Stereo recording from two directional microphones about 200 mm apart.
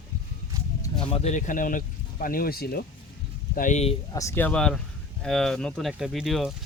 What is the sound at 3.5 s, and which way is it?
Speech, 40° left (ahead or behind).